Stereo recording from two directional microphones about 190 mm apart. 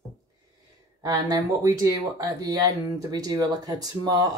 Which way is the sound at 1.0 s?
20° right (ahead or behind).